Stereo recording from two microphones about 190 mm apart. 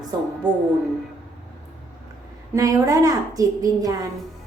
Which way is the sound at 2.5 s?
20° right (ahead or behind).